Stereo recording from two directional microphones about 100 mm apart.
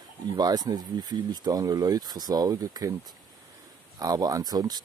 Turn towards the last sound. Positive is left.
turn(degrees=-40)  # may be behind; listen again after turning